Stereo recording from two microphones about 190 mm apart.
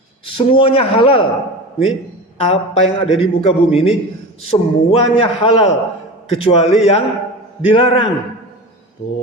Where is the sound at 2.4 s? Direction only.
30° left (ahead or behind).